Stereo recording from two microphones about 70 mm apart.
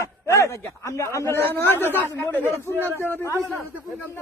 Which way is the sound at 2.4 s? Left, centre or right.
Right.